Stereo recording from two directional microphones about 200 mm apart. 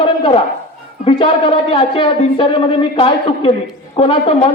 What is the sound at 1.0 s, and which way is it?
A man's voice, 25° left (ahead or behind).